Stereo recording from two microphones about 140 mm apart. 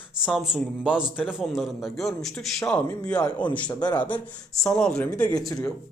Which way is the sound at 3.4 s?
30° left (ahead or behind).